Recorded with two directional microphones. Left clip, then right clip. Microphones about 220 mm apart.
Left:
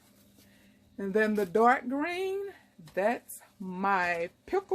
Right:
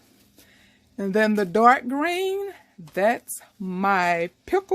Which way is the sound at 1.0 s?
45° right (ahead or behind).